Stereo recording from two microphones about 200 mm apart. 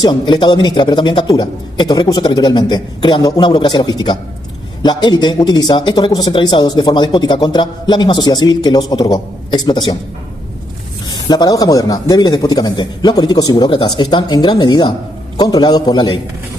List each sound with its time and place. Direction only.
0.0 s a man's voice: 25° left (ahead or behind)
11.1 s a man's voice: 20° left (ahead or behind)